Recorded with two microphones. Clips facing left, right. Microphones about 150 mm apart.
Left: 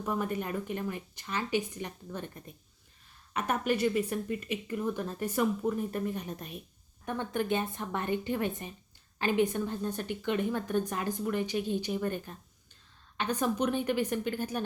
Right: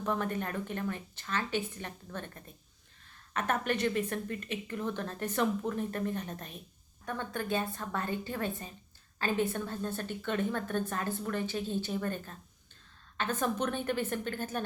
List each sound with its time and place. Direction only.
0.0 s a woman's voice: 10° left (ahead or behind)